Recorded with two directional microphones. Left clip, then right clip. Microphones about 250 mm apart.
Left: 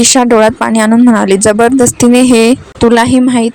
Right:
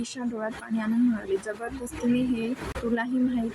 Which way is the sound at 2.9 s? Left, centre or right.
Left.